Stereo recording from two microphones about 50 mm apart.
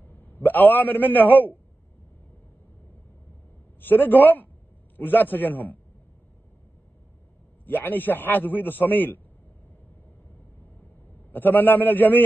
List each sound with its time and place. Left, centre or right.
0.0 s a man's voice: left
3.8 s a man's voice: left
7.6 s a man's voice: left
11.3 s a man's voice: left